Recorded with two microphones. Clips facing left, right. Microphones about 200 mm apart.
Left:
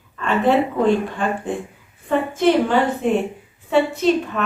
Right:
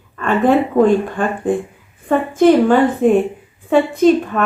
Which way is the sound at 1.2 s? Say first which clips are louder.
Right 3 dB; 55° right (ahead or behind).